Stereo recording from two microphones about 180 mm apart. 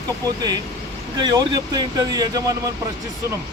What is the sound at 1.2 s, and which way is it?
Speech, 25° right (ahead or behind).